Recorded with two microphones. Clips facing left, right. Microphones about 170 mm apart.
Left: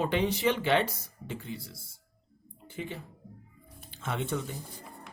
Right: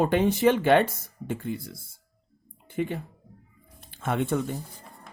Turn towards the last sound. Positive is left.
turn(degrees=-55)  # may be behind; listen again after turning